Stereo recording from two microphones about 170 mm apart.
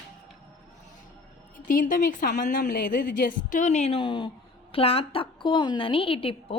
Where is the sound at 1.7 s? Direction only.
50° left (ahead or behind).